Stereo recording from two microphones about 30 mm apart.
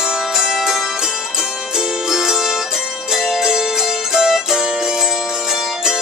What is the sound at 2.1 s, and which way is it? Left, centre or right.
Music, centre.